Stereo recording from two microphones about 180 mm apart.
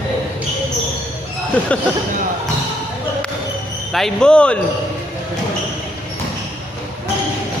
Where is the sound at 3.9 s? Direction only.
Centre (ahead or behind).